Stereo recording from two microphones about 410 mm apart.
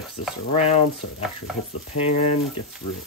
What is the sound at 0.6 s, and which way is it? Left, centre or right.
Speech, centre.